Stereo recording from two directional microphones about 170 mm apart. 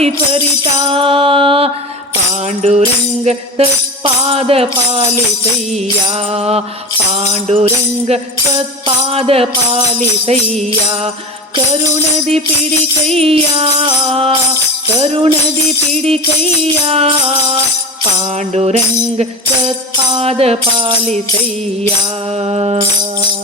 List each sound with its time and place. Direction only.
0.9 s music: 30° right (ahead or behind)
6.3 s music: 35° right (ahead or behind)
13.1 s music: 35° right (ahead or behind)
22.4 s music: 35° right (ahead or behind)